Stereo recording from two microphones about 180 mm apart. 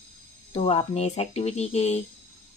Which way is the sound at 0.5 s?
35° left (ahead or behind).